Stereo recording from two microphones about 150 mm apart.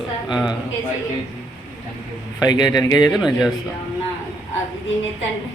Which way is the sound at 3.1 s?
Centre (ahead or behind).